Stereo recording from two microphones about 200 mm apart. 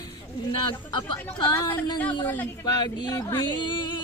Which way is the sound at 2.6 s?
20° left (ahead or behind).